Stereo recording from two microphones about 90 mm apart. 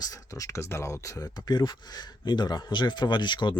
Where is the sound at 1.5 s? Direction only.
50° left (ahead or behind).